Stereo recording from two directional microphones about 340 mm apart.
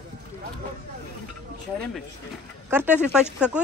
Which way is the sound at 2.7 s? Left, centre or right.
Centre.